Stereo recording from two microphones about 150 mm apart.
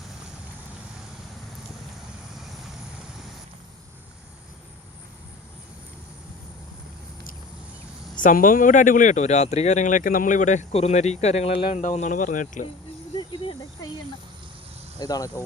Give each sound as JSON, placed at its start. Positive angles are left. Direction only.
{"t": 8.1, "sound": "speech", "side_deg": 60}
{"t": 13.1, "sound": "cricket", "side_deg": 35}
{"t": 14.9, "sound": "speech", "side_deg": 25}